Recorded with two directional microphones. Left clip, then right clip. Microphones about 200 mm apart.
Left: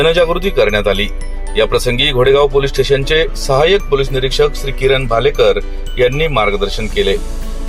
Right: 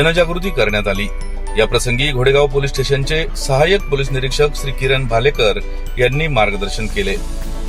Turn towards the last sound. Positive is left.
turn(degrees=0)  # may be behind; listen again after turning